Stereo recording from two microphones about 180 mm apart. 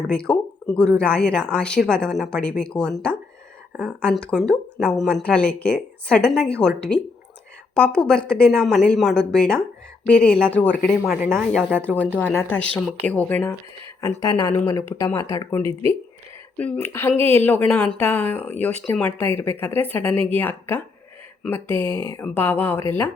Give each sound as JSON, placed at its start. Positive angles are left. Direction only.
{"t": 0.1, "sound": "speech", "side_deg": 5}
{"t": 11.5, "sound": "speech", "side_deg": 5}